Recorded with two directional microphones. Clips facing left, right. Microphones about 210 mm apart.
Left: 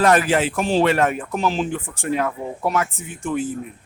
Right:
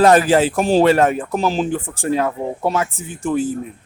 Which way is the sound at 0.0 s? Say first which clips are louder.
Right 5 dB; 35° right (ahead or behind).